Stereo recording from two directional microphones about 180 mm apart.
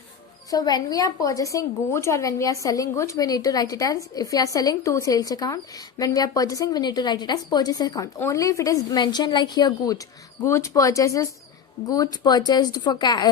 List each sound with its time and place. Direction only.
0.5 s a woman's voice: 20° left (ahead or behind)